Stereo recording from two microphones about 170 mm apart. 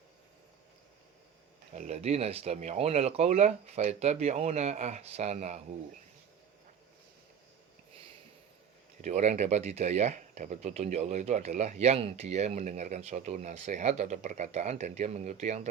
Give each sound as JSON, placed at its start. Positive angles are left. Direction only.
{"t": 1.7, "sound": "speech", "side_deg": -40}
{"t": 9.0, "sound": "speech", "side_deg": -45}